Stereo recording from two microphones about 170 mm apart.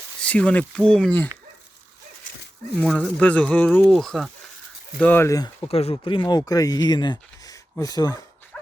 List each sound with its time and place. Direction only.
0.2 s speech: 10° left (ahead or behind)
2.7 s speech: centre (ahead or behind); by 5.6 s 20° left (ahead or behind)
5.6 s speech: 35° left (ahead or behind)